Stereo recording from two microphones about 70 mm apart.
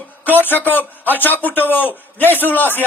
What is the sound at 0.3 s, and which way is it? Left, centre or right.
A man's voice, left.